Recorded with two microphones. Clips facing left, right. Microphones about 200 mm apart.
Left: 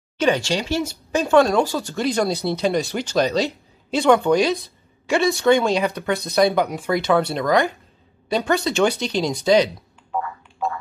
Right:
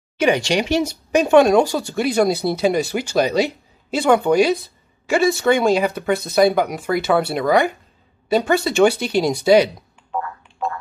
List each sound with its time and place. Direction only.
0.2 s speech: 15° right (ahead or behind)
10.1 s frog: centre (ahead or behind)